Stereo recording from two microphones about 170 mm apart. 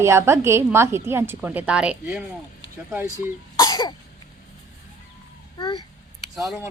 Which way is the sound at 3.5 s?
25° left (ahead or behind).